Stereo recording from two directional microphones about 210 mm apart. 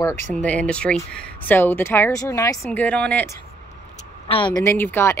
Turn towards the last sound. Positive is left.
turn(degrees=10)  # may be behind; listen again after turning